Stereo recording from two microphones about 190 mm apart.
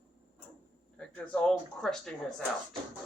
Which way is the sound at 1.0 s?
5° left (ahead or behind).